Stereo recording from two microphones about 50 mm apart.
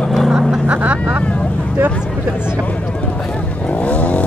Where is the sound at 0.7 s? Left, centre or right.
Right.